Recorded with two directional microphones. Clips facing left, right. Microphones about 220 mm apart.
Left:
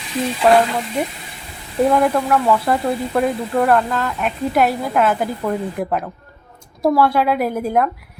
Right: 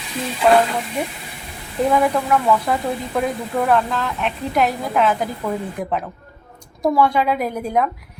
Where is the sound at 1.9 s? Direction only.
Centre (ahead or behind).